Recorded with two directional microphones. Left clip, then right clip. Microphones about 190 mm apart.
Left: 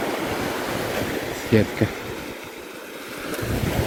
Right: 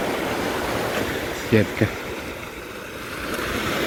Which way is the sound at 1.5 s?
15° left (ahead or behind).